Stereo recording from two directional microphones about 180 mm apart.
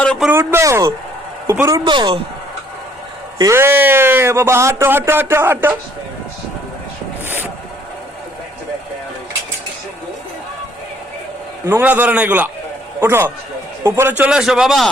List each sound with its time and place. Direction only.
0.0 s a sound: 5° left (ahead or behind)
0.3 s speech: 15° right (ahead or behind)
3.3 s speech: 15° right (ahead or behind)
11.6 s a man's voice: 10° right (ahead or behind)